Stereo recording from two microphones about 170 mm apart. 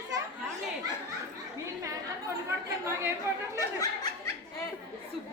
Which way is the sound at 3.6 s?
20° left (ahead or behind).